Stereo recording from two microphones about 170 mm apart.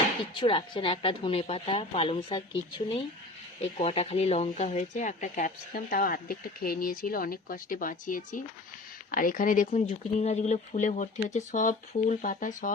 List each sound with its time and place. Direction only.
0.3 s speech: 30° left (ahead or behind); by 12.7 s 55° left (ahead or behind)